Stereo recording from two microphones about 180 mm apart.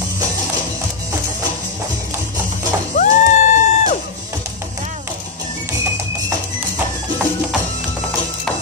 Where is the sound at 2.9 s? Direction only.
45° left (ahead or behind).